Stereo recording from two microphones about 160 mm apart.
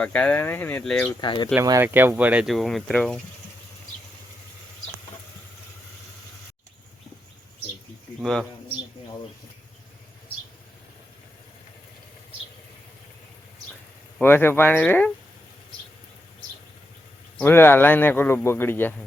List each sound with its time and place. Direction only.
0.0 s a man's voice: 10° left (ahead or behind)
1.2 s speech: 30° left (ahead or behind)
1.5 s speech: 15° right (ahead or behind); by 3.2 s 5° left (ahead or behind)
8.2 s speech: 5° left (ahead or behind)
14.2 s a man's voice: 15° left (ahead or behind)
17.4 s a man's voice: 15° left (ahead or behind)